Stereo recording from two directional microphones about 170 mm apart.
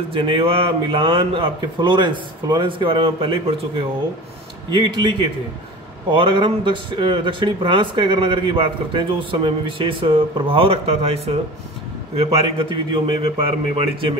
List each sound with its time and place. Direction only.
0.1 s a man's voice: 35° right (ahead or behind)
4.6 s a man's voice: 30° right (ahead or behind)